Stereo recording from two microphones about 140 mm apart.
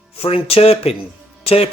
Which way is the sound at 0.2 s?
45° left (ahead or behind).